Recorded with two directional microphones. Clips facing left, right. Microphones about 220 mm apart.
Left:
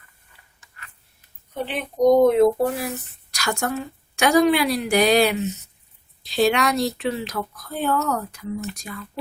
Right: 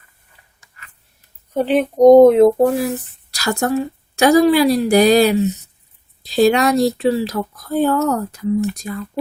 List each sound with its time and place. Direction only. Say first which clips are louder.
1.5 s speech: right 10 dB; 45° right (ahead or behind)